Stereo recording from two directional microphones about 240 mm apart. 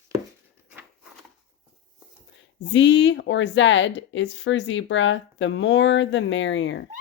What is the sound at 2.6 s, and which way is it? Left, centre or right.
Speech, left.